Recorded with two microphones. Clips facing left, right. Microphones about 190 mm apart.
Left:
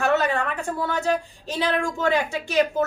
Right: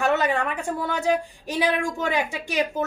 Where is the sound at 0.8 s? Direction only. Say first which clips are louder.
Right 1 dB; 15° right (ahead or behind).